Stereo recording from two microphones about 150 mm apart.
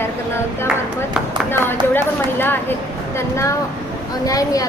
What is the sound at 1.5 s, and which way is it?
Speech, 15° left (ahead or behind).